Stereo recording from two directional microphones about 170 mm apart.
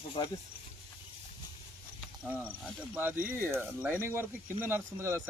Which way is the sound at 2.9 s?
10° right (ahead or behind).